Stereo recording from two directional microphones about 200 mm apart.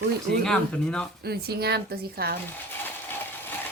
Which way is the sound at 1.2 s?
50° right (ahead or behind).